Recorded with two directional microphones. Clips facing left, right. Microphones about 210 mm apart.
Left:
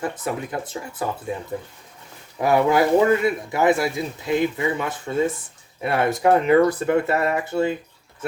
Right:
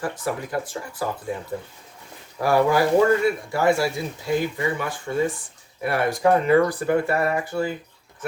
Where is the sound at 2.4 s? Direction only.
20° left (ahead or behind).